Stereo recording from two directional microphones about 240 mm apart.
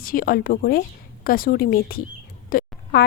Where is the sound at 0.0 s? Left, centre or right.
Left.